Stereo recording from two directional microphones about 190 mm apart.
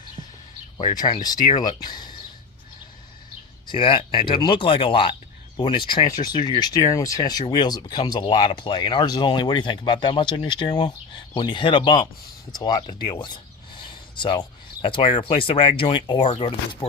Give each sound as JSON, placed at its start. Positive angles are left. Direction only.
{"t": 1.2, "sound": "speech", "side_deg": 20}
{"t": 3.7, "sound": "speech", "side_deg": 25}